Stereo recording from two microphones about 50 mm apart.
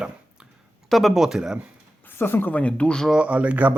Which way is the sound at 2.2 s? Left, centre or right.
Left.